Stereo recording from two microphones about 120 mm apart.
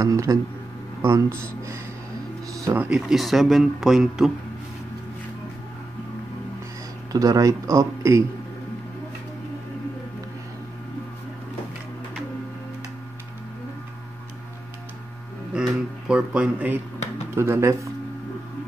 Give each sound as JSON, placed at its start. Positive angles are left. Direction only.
{"t": 0.0, "sound": "speech", "side_deg": -25}
{"t": 3.1, "sound": "speech", "side_deg": 0}
{"t": 7.1, "sound": "speech", "side_deg": -30}
{"t": 15.5, "sound": "a sound", "side_deg": -5}
{"t": 17.4, "sound": "speech", "side_deg": -20}